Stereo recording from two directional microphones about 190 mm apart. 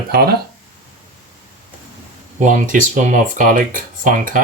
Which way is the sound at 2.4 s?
40° right (ahead or behind).